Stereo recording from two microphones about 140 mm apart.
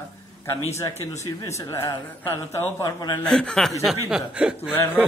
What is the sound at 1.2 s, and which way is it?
A man's voice, 25° left (ahead or behind).